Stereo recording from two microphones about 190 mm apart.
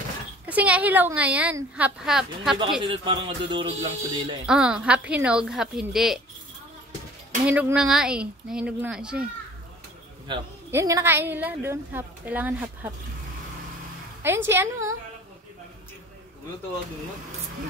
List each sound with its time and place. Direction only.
0.5 s a woman's voice: 10° right (ahead or behind)
2.9 s speech: 25° right (ahead or behind)
4.5 s a woman's voice: 5° right (ahead or behind)
7.4 s a woman's voice: 5° right (ahead or behind)
10.3 s speech: 25° right (ahead or behind)
10.7 s a woman's voice: 15° right (ahead or behind)
14.2 s a woman's voice: 10° right (ahead or behind)